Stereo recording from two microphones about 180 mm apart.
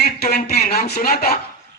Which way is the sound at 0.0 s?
60° left (ahead or behind).